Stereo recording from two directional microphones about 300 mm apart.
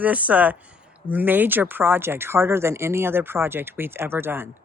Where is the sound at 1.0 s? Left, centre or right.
Centre.